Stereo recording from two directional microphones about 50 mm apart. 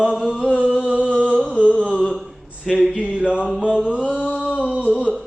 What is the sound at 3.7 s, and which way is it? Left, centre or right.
Mantra, centre.